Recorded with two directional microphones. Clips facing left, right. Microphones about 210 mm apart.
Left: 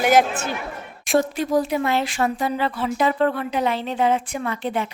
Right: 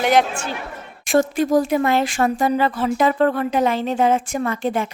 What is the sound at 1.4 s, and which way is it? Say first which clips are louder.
Speech: right 4 dB; 45° right (ahead or behind).